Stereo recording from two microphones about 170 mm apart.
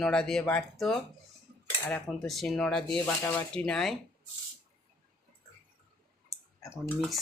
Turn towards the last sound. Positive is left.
turn(degrees=0)  # may be behind; listen again after turning